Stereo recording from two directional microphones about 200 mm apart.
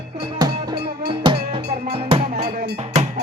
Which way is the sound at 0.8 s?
55° right (ahead or behind).